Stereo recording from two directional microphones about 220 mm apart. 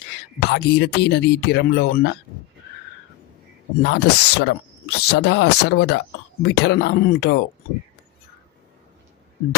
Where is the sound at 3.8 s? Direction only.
50° left (ahead or behind).